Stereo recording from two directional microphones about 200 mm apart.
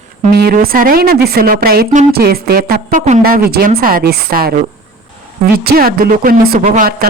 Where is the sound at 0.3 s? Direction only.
50° right (ahead or behind).